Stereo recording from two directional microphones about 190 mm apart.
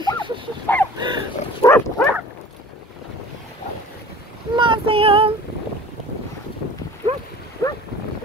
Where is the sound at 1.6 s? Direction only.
15° left (ahead or behind).